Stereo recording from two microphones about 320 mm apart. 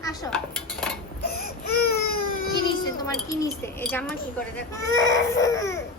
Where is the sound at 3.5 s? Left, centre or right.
Centre.